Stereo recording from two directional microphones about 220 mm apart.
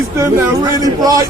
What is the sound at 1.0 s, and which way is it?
Speech, 15° right (ahead or behind).